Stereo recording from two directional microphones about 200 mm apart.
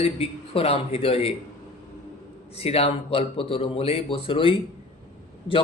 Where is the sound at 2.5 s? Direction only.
30° left (ahead or behind).